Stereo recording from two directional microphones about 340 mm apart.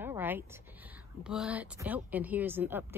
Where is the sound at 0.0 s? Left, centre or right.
Centre.